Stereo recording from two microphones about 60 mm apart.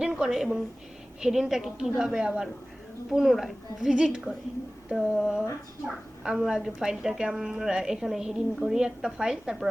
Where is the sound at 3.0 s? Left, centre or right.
Centre.